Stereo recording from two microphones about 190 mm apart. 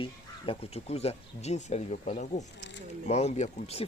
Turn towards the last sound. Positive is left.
turn(degrees=35)  # may be behind; listen again after turning